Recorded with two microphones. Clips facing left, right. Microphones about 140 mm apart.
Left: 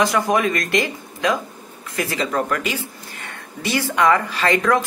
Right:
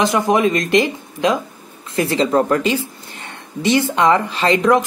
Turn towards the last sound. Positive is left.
turn(degrees=-20)  # may be behind; listen again after turning